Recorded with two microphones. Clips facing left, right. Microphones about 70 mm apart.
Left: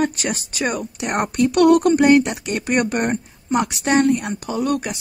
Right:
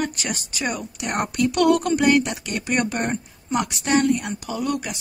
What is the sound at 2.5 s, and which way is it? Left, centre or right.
A woman's voice, left.